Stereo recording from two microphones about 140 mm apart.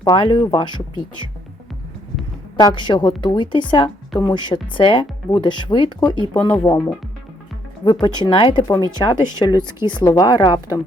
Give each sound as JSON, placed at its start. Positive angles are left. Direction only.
{"t": 0.0, "sound": "speech", "side_deg": 30}
{"t": 2.6, "sound": "speech", "side_deg": 30}
{"t": 8.0, "sound": "speech", "side_deg": 30}
{"t": 10.0, "sound": "a woman's voice", "side_deg": 20}
{"t": 10.2, "sound": "speech", "side_deg": 30}